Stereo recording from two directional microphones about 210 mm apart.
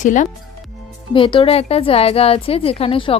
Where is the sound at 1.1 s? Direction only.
25° left (ahead or behind).